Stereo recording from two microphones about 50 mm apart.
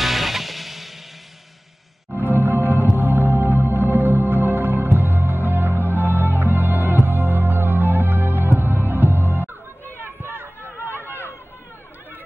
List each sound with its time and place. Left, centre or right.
0.0 s music: centre
2.1 s music: right
10.2 s a sound: right